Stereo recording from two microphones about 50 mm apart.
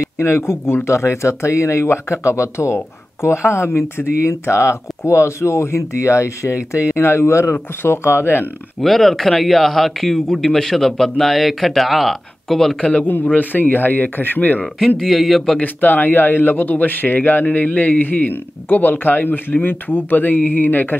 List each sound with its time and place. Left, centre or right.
0.2 s speech: left
0.8 s speech: left
7.5 s speech: left
8.8 s a man's voice: centre
13.0 s speech: left
15.0 s a man's voice: centre
15.6 s speech: left